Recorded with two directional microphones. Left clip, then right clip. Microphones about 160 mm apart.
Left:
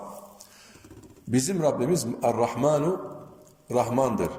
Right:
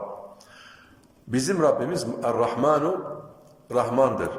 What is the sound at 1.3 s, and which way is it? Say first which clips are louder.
A man's voice: right 3 dB; 25° left (ahead or behind).